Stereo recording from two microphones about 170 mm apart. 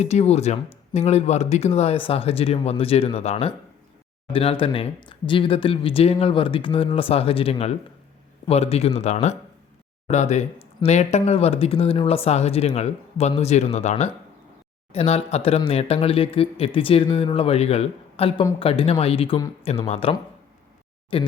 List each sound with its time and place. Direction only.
0.0 s speech: 40° left (ahead or behind)
14.9 s speech: 35° left (ahead or behind)